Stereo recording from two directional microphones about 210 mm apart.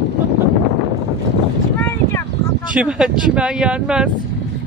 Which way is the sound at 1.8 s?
10° left (ahead or behind).